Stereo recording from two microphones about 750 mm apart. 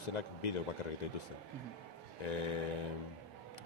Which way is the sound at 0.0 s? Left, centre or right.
Left.